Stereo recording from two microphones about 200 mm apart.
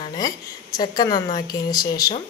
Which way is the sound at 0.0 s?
20° left (ahead or behind).